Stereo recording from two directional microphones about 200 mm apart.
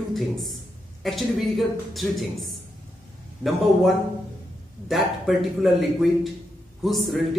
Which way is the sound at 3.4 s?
Centre (ahead or behind).